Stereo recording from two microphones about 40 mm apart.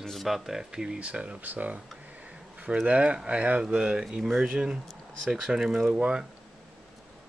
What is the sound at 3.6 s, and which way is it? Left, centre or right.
Speech, right.